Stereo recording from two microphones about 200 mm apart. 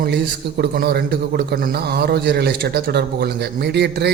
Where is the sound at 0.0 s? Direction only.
55° right (ahead or behind).